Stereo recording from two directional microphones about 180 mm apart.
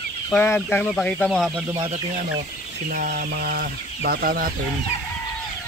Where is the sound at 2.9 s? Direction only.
50° right (ahead or behind).